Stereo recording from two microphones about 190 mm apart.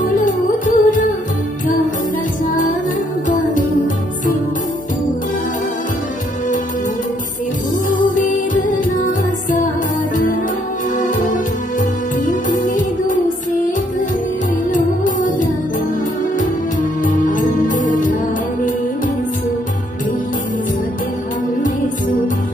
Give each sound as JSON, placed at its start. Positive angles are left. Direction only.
{"t": 0.1, "sound": "music", "side_deg": 45}
{"t": 3.3, "sound": "music", "side_deg": 45}
{"t": 7.9, "sound": "music", "side_deg": 45}
{"t": 12.3, "sound": "music", "side_deg": 45}
{"t": 14.7, "sound": "music", "side_deg": 45}
{"t": 17.0, "sound": "music", "side_deg": 45}